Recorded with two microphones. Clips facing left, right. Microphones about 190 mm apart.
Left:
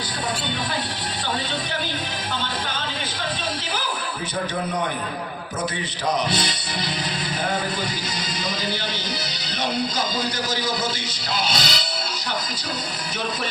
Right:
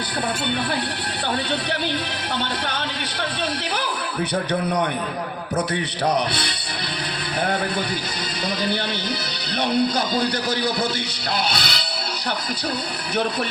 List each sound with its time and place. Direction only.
6.1 s speech: 60° right (ahead or behind)
11.4 s speech: 60° right (ahead or behind)